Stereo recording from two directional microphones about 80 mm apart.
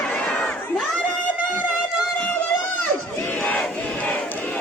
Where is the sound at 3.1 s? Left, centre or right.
Left.